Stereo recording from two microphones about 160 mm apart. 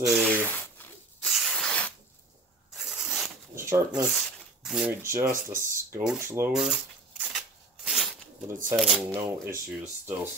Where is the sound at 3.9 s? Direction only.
Centre (ahead or behind).